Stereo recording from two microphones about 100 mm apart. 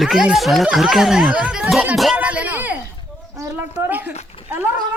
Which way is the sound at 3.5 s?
20° right (ahead or behind).